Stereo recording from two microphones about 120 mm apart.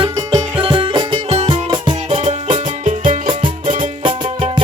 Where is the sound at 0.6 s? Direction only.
45° right (ahead or behind).